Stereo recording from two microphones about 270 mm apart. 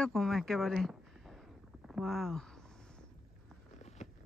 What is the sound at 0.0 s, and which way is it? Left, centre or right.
Speech, centre.